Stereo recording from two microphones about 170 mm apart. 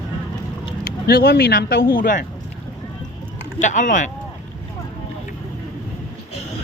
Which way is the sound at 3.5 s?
45° left (ahead or behind).